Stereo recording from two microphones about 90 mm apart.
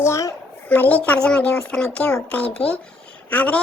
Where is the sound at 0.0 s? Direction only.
35° left (ahead or behind).